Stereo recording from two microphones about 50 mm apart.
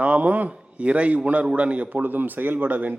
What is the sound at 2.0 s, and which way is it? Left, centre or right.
Speech, right.